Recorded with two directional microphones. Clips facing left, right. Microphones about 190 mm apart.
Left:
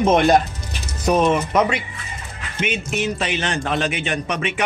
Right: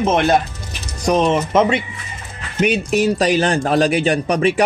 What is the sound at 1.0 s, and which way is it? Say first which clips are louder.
Speech: right 1 dB; 20° right (ahead or behind).